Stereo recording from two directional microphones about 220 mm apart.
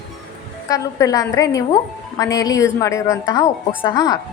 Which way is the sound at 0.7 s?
15° left (ahead or behind).